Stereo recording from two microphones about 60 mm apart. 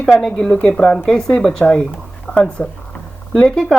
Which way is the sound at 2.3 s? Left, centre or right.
Left.